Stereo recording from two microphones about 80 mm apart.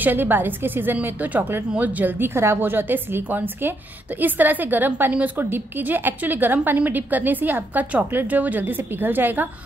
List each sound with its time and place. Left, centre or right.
0.0 s a woman's voice: right